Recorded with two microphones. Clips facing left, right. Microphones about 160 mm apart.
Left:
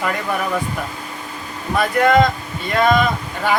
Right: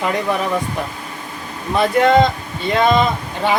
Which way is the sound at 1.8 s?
25° right (ahead or behind).